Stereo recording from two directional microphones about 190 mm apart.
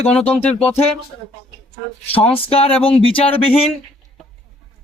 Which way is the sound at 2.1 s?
30° left (ahead or behind).